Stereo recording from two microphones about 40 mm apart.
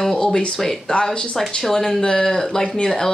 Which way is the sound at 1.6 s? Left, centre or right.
Centre.